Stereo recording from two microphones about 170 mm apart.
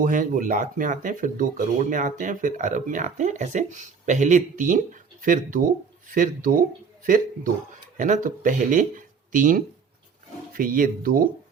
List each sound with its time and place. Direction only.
0.0 s speech: 50° right (ahead or behind)